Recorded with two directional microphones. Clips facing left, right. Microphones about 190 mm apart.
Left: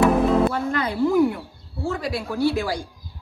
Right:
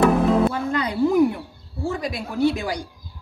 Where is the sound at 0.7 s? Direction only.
15° right (ahead or behind).